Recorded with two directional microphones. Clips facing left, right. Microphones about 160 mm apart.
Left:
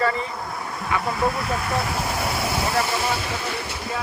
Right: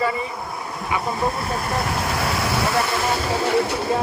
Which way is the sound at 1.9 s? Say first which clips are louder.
Right 2 dB; 80° right.